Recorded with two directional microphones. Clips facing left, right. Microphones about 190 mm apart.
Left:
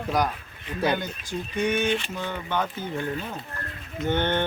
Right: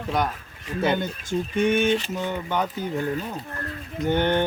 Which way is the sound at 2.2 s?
15° right (ahead or behind).